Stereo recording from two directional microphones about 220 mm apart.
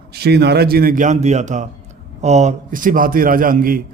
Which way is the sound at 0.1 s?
45° right (ahead or behind).